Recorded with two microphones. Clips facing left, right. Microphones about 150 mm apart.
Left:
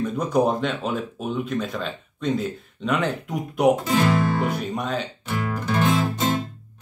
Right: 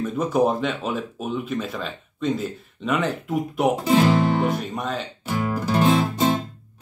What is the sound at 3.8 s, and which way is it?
Speech, 25° right (ahead or behind).